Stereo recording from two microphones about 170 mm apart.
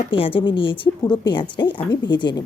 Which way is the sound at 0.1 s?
30° left (ahead or behind).